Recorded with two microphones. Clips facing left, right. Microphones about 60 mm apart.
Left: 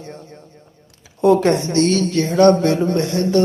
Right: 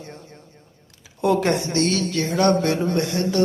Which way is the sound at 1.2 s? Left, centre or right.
Left.